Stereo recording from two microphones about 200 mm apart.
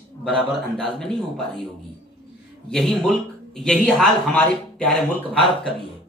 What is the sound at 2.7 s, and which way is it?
A man's voice, centre (ahead or behind).